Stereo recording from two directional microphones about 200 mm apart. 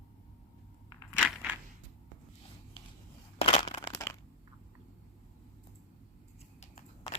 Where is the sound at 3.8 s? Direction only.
15° left (ahead or behind).